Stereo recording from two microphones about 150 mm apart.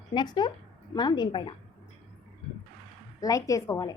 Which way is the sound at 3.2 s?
25° left (ahead or behind).